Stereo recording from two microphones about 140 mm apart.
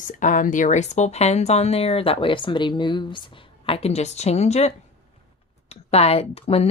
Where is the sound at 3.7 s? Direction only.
45° left (ahead or behind).